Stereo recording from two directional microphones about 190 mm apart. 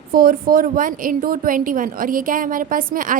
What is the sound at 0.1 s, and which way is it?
A woman's voice, 50° right (ahead or behind).